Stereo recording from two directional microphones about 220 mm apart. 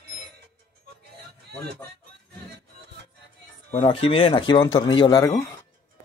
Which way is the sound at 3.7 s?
30° left (ahead or behind).